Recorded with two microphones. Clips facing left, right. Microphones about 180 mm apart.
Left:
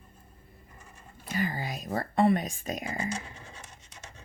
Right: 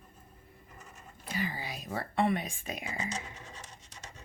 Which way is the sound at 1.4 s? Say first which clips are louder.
Left 5 dB; 45° left (ahead or behind).